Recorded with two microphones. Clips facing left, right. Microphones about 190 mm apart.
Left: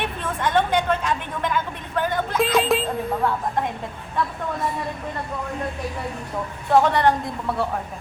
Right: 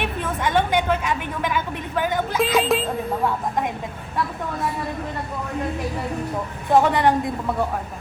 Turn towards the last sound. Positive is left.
turn(degrees=-15)  # may be behind; listen again after turning